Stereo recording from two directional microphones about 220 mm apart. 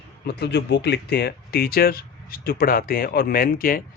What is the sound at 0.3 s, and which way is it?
Speech, 50° left (ahead or behind).